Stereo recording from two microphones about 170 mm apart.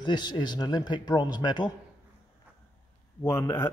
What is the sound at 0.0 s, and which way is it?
A man's voice, 25° left (ahead or behind).